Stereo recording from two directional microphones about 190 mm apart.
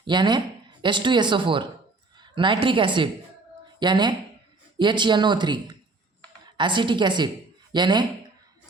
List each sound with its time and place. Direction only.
0.0 s a woman's voice: 25° right (ahead or behind)